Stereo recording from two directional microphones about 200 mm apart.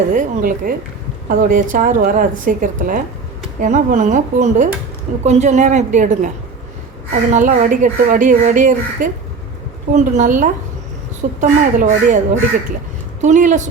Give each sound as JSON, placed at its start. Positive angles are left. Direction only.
{"t": 0.1, "sound": "speech", "side_deg": -45}
{"t": 13.2, "sound": "speech", "side_deg": -40}